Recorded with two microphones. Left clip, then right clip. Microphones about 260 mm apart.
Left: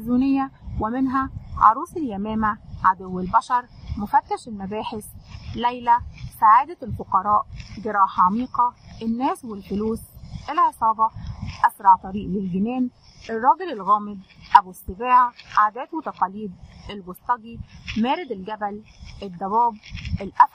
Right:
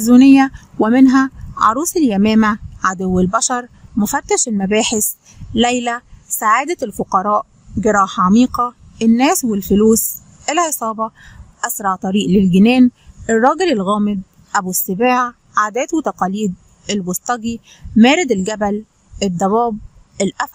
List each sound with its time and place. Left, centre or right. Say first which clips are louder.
0.1 s a woman's voice: right 13 dB; right